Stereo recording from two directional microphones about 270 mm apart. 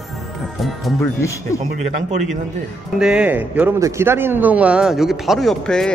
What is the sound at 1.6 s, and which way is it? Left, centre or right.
Speech, right.